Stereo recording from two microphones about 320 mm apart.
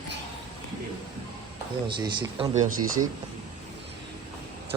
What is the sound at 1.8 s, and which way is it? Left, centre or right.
Speech, centre.